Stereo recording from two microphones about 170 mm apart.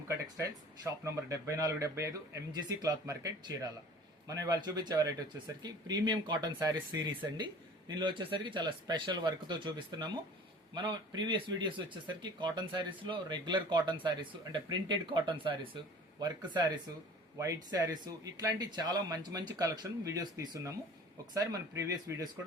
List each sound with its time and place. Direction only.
0.3 s speech: 20° right (ahead or behind)